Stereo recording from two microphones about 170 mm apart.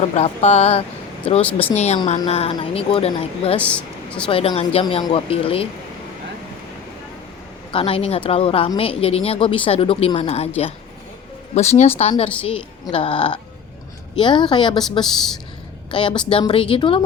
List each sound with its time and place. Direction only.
0.2 s speech: 40° left (ahead or behind)
1.4 s speech: 10° left (ahead or behind)
1.7 s speech: 40° left (ahead or behind)
3.6 s speech: 5° left (ahead or behind)
4.3 s speech: 35° left (ahead or behind)
7.7 s speech: 35° left (ahead or behind)
11.5 s a woman's voice: 40° left (ahead or behind)
15.0 s speech: centre (ahead or behind)
15.9 s a woman's voice: 30° left (ahead or behind)